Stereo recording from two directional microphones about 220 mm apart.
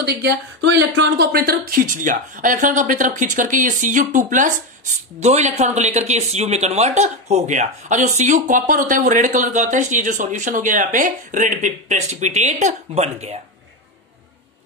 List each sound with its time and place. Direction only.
0.0 s speech: 50° right (ahead or behind); by 13.4 s 30° right (ahead or behind)